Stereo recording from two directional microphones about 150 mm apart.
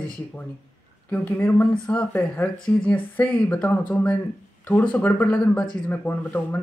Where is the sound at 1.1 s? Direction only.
10° left (ahead or behind).